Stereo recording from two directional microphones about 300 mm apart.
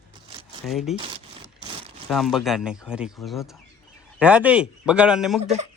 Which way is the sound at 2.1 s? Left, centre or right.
Centre.